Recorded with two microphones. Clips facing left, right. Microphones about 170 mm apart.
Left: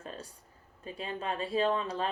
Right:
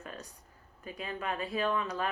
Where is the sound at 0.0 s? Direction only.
30° left (ahead or behind).